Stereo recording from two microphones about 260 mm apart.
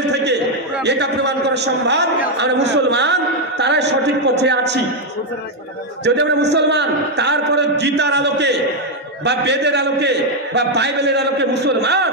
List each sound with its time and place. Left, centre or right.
0.1 s a sound: right
0.8 s a man's voice: right
6.0 s a man's voice: right